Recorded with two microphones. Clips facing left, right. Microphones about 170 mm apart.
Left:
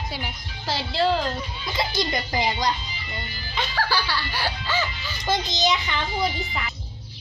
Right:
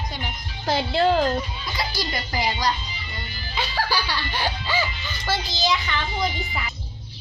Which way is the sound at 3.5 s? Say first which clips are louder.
Even; 10° right (ahead or behind).